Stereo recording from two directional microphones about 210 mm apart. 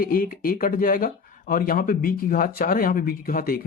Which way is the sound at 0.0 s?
45° left (ahead or behind).